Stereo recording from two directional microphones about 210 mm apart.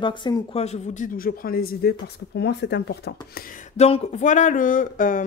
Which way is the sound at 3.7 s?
30° left (ahead or behind).